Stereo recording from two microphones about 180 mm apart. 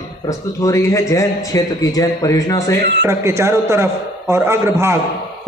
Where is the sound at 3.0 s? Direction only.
15° right (ahead or behind).